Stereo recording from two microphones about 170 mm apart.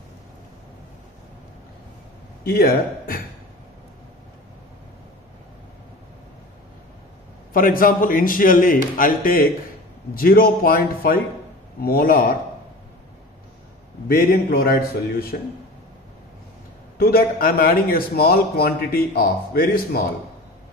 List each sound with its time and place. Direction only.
2.4 s a man's voice: 65° left (ahead or behind)
7.5 s a man's voice: 55° left (ahead or behind)
14.0 s a man's voice: 60° left (ahead or behind)
17.0 s a man's voice: 60° left (ahead or behind)